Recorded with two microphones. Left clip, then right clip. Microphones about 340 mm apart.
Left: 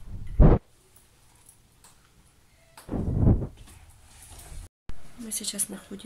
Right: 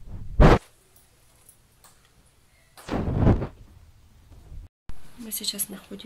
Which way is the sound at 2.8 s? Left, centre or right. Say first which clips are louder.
Right 4 dB; right.